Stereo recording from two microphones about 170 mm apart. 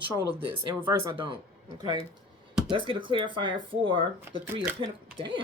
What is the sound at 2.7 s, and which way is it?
Speech, 30° right (ahead or behind).